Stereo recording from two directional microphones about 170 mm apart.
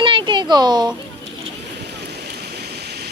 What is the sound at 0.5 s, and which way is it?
Speech, 25° right (ahead or behind).